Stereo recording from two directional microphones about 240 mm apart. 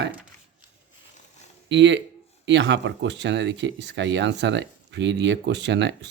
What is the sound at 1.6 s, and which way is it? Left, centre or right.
Speech, right.